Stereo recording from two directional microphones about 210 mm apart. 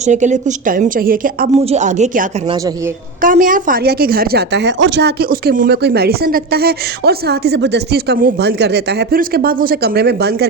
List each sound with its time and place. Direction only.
0.0 s a woman's voice: 35° right (ahead or behind)
1.6 s a woman's voice: 35° right (ahead or behind)
2.5 s speech: 20° right (ahead or behind)
3.2 s a woman's voice: 40° right (ahead or behind)